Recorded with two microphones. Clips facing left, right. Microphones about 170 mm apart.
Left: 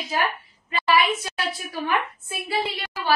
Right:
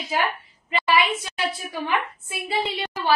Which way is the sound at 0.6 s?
20° right (ahead or behind).